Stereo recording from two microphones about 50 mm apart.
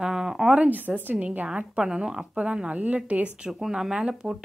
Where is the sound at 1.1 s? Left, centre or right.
Right.